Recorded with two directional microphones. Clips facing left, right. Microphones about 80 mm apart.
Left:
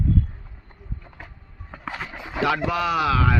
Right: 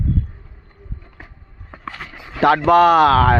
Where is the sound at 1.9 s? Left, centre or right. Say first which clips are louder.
Even; centre.